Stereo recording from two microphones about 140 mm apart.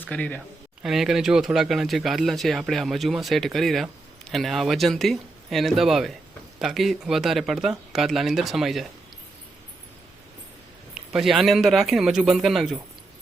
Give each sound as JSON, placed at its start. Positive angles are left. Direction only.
{"t": 0.0, "sound": "speech", "side_deg": 10}
{"t": 0.8, "sound": "speech", "side_deg": -5}
{"t": 11.1, "sound": "speech", "side_deg": 0}